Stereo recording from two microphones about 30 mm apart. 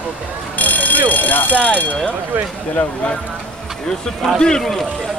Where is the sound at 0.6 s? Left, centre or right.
Left.